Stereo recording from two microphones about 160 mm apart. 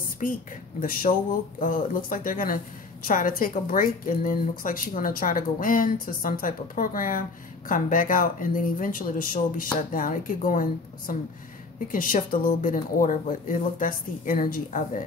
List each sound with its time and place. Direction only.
0.2 s a woman's voice: 60° left (ahead or behind)